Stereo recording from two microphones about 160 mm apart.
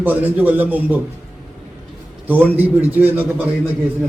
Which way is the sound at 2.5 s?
10° right (ahead or behind).